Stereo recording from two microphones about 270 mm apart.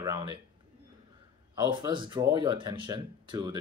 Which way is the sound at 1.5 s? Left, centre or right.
Centre.